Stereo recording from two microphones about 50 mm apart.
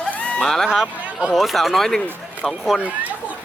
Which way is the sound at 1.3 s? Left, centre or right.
Centre.